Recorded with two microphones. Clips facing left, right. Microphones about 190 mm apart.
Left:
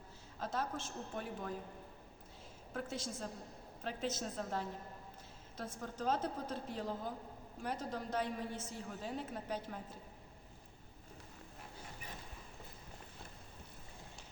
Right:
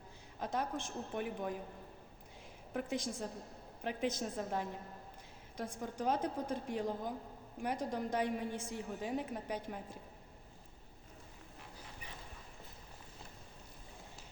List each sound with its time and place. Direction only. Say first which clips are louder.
0.3 s a woman's voice: right 2 dB; 15° right (ahead or behind)
2.7 s a woman's voice: right 4 dB; 15° right (ahead or behind)